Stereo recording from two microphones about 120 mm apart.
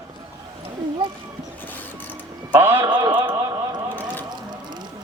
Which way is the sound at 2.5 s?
20° right (ahead or behind).